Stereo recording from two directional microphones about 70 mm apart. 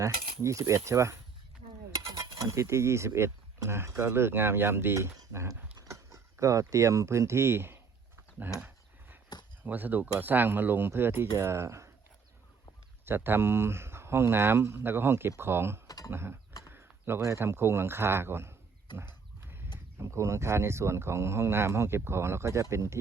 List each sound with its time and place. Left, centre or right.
0.0 s speech: right
9.3 s a sound: left
9.6 s speech: right
13.1 s speech: right
16.6 s a sound: right
17.2 s speech: right
18.9 s horse: left
19.4 s horse: right
20.0 s speech: right